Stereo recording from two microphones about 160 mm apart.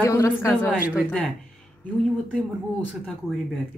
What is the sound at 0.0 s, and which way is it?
Speech, 20° left (ahead or behind).